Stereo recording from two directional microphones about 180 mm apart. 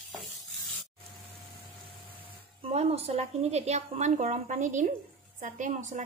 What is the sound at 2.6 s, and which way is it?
A woman's voice, 35° right (ahead or behind).